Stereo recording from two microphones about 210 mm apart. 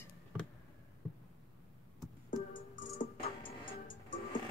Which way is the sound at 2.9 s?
30° left (ahead or behind).